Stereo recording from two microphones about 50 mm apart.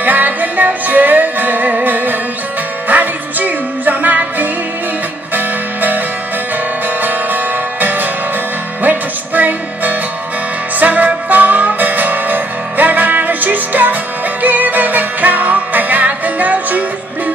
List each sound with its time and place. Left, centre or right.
0.0 s music: right